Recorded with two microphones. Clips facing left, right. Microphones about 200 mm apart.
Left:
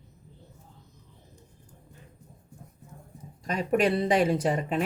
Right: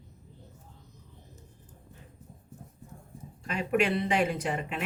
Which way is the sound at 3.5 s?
35° left (ahead or behind).